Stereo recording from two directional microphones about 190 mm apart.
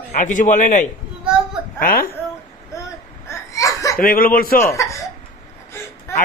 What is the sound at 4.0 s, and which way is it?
Speech, 50° left (ahead or behind).